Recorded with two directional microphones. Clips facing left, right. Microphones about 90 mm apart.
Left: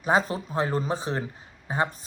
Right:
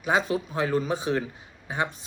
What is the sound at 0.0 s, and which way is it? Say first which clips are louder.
Speech: left 1 dB; 40° left (ahead or behind).